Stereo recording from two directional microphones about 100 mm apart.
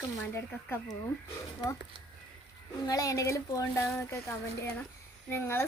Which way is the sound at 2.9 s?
35° left (ahead or behind).